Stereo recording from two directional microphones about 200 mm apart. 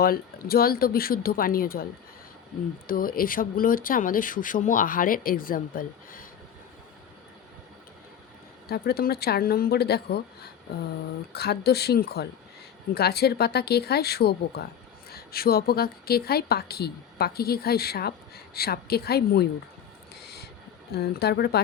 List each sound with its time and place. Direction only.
0.0 s a woman's voice: 50° left (ahead or behind)
8.6 s a woman's voice: 50° left (ahead or behind)
20.2 s vehicle: 55° left (ahead or behind)
20.9 s a woman's voice: 55° left (ahead or behind)